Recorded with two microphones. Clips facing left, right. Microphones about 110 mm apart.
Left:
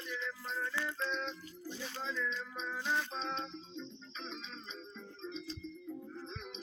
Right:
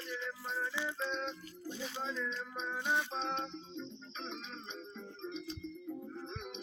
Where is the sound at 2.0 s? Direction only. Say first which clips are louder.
Left 2 dB; 40° right (ahead or behind).